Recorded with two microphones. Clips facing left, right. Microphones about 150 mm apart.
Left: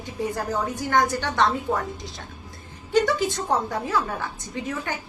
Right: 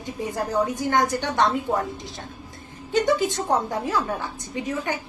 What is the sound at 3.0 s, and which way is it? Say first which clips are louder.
Speech: right 2 dB; 20° right (ahead or behind).